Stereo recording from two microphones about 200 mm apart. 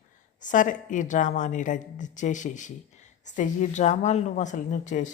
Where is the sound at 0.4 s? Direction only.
40° left (ahead or behind).